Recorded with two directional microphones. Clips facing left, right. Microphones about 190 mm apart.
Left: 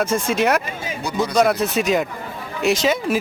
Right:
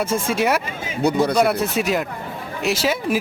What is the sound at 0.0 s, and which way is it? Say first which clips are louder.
A man's voice: left 1 dB; 10° right (ahead or behind).